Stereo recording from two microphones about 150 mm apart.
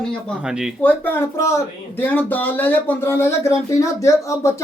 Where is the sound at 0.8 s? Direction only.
15° left (ahead or behind).